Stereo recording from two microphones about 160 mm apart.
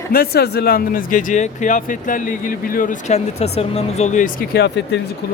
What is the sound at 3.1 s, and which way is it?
Speech, 40° left (ahead or behind).